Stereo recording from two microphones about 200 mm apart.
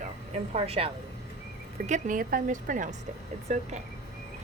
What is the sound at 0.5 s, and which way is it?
Speech, 30° right (ahead or behind).